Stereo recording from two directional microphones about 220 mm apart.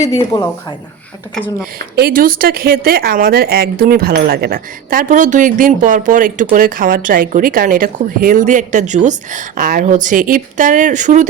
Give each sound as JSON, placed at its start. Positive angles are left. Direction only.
{"t": 0.0, "sound": "a woman's voice", "side_deg": 15}
{"t": 2.0, "sound": "a woman's voice", "side_deg": -45}